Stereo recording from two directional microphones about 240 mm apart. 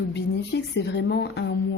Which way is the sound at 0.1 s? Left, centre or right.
Left.